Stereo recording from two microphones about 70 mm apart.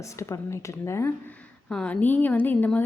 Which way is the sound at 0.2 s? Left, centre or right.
Left.